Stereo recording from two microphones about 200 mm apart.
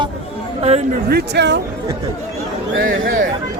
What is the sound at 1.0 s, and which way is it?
Speech, 55° right (ahead or behind).